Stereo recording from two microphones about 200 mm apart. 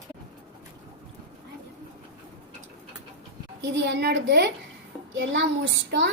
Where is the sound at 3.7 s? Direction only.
60° right (ahead or behind).